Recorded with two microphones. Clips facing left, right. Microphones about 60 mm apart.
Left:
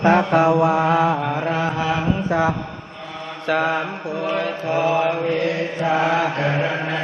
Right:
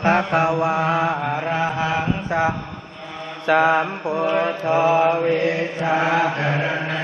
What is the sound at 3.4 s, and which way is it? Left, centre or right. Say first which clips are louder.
Mantra: right 4 dB; centre.